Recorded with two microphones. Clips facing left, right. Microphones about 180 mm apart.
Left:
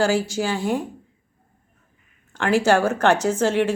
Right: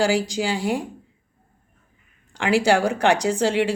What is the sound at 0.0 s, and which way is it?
Speech, 15° right (ahead or behind).